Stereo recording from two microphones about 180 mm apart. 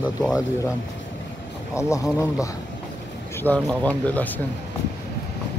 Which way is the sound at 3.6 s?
5° left (ahead or behind).